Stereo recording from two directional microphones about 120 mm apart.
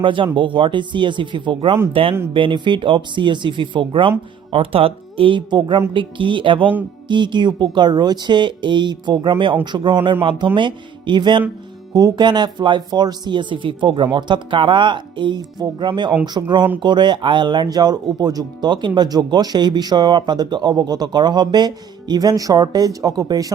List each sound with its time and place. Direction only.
0.0 s speech: 45° right (ahead or behind)